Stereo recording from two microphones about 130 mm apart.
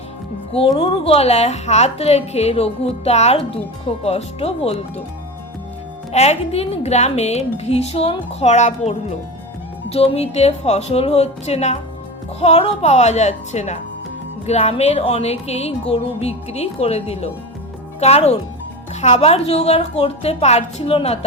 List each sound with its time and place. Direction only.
0.7 s a woman's voice: 45° left (ahead or behind)
6.1 s a woman's voice: 55° left (ahead or behind)